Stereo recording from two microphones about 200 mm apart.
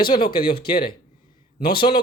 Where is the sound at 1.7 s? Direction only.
25° left (ahead or behind).